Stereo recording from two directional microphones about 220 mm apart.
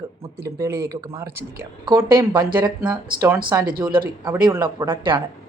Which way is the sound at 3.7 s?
40° right (ahead or behind).